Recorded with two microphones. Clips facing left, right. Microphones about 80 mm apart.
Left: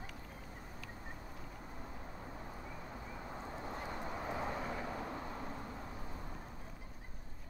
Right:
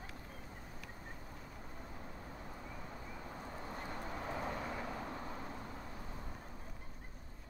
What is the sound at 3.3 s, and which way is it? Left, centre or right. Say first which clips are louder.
Duck: left 2 dB; centre.